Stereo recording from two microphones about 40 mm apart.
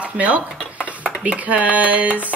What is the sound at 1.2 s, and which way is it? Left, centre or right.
Speech, right.